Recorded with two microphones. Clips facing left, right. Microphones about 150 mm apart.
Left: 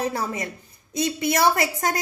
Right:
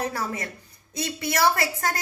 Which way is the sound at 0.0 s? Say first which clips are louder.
Left 3 dB; 20° left (ahead or behind).